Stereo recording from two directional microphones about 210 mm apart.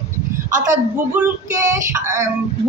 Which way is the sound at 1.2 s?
10° right (ahead or behind).